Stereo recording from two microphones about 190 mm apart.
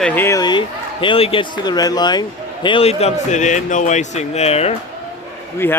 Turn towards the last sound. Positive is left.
turn(degrees=10)  # may be behind; listen again after turning